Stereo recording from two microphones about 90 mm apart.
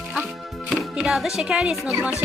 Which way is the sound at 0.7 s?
Centre (ahead or behind).